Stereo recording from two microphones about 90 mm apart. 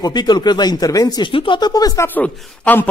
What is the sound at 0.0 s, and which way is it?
A man's voice, 50° left (ahead or behind).